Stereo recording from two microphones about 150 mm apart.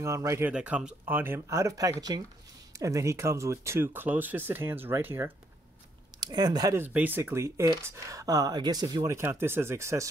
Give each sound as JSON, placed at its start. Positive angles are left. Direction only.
{"t": 0.0, "sound": "speech", "side_deg": -20}
{"t": 0.5, "sound": "speech", "side_deg": -10}
{"t": 6.1, "sound": "speech", "side_deg": -25}
{"t": 6.7, "sound": "speech", "side_deg": -15}